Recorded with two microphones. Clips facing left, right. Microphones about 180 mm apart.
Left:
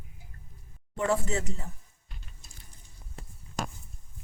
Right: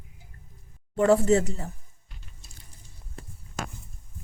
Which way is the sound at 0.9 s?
35° right (ahead or behind).